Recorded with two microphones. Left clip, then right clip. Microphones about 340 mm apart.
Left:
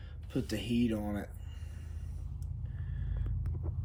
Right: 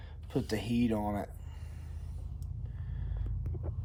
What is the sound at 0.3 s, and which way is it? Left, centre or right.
Speech, right.